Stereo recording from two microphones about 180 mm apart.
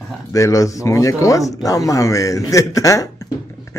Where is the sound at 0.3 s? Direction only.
20° left (ahead or behind).